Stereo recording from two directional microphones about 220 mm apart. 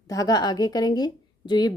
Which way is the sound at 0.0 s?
15° left (ahead or behind).